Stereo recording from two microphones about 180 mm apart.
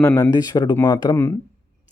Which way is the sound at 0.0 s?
15° left (ahead or behind).